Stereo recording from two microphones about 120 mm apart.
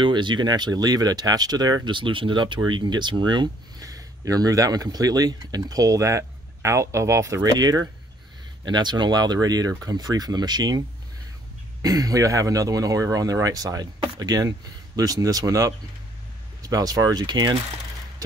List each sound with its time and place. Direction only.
0.0 s speech: 40° right (ahead or behind)
11.8 s speech: 30° right (ahead or behind)